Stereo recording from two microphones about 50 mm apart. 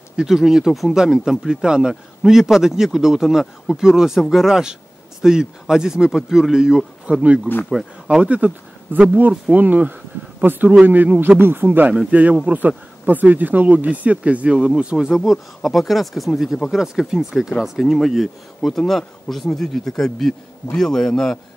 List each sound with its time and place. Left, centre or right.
0.3 s speech: centre
7.8 s speech: centre
8.2 s speech: right
15.1 s a man's voice: centre